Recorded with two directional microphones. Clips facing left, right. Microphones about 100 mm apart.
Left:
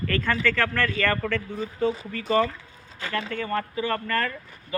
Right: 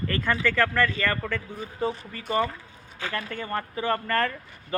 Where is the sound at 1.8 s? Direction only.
40° right (ahead or behind).